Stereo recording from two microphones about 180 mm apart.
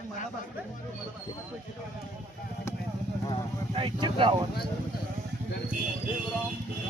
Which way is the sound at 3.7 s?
30° right (ahead or behind).